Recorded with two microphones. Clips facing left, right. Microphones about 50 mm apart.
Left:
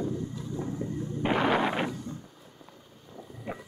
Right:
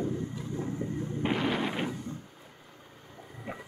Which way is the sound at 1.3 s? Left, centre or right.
Left.